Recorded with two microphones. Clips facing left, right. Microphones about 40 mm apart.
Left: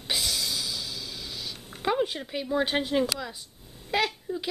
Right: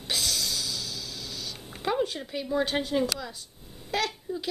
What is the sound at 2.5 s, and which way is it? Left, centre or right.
A woman's voice, centre.